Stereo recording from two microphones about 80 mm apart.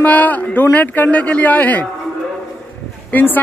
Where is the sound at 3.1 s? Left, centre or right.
Left.